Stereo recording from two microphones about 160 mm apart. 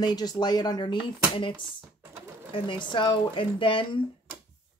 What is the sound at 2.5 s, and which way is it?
Speech, 30° left (ahead or behind).